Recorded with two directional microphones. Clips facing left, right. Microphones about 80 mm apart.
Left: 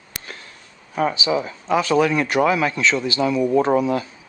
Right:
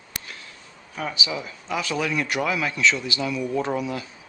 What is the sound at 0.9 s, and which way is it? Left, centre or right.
A man's voice, left.